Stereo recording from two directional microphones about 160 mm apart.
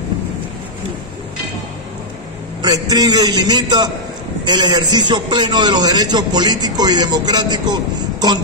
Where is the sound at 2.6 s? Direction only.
25° right (ahead or behind).